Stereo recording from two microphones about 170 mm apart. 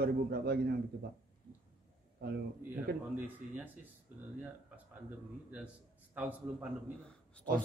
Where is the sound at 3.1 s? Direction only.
10° right (ahead or behind).